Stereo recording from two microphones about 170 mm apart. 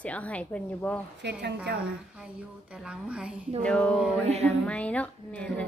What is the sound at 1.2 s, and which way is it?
Speech, 80° right.